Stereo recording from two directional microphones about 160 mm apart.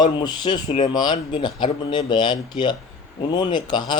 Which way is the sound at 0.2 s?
25° left (ahead or behind).